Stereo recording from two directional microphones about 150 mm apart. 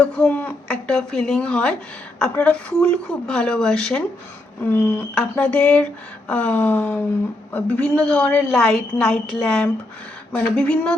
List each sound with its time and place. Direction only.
0.0 s a woman's voice: 10° left (ahead or behind)